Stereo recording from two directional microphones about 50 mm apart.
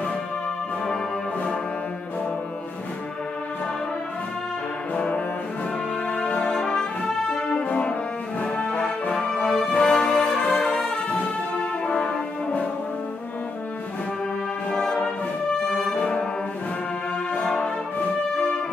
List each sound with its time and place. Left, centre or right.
4.9 s brass instrument: left
6.1 s music: left
6.4 s brass instrument: centre
7.4 s music: left
8.4 s brass instrument: centre
9.2 s music: centre
11.8 s brass instrument: centre
14.7 s brass instrument: centre